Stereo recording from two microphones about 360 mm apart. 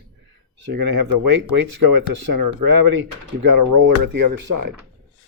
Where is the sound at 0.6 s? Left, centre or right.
Right.